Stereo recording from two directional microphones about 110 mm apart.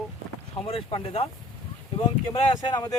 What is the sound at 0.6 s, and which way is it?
Speech, 60° left (ahead or behind).